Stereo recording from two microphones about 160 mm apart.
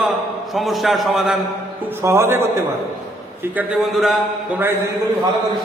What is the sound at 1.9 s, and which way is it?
A man's voice, 15° right (ahead or behind).